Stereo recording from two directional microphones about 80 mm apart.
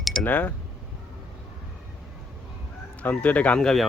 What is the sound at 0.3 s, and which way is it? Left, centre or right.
Speech, left.